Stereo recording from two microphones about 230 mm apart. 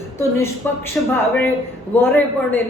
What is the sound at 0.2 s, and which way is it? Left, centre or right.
Speech, centre.